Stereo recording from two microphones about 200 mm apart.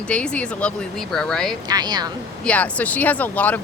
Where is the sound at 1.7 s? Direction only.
20° right (ahead or behind).